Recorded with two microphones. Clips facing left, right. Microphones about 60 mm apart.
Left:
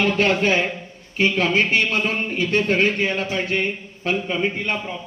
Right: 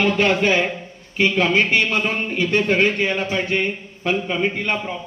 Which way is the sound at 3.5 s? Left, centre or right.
Centre.